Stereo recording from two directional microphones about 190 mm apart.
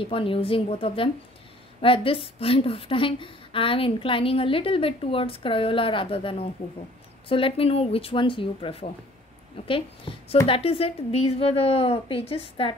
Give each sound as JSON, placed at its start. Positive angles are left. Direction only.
{"t": 0.0, "sound": "a woman's voice", "side_deg": 30}